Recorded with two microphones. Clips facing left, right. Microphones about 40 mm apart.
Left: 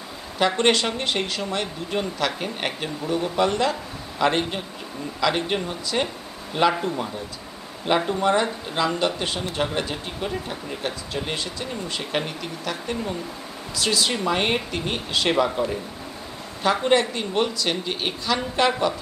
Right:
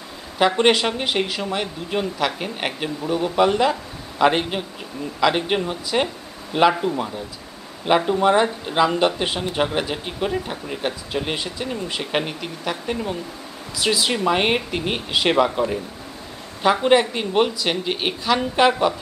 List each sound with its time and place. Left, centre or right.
0.4 s speech: centre
8.1 s speech: centre